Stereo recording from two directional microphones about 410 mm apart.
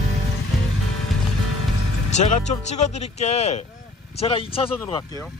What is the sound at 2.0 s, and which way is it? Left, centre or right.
Speech, centre.